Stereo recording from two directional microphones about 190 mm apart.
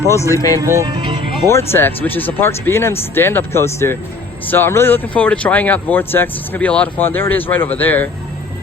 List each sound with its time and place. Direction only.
0.1 s speech: 15° left (ahead or behind)
0.6 s speech: 15° right (ahead or behind)
1.5 s speech: 15° left (ahead or behind)